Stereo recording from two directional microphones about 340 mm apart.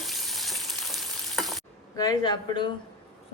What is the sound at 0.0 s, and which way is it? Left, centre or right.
Frying, centre.